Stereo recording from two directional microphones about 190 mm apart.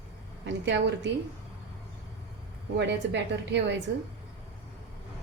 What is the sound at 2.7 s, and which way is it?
A woman's voice, 65° right (ahead or behind).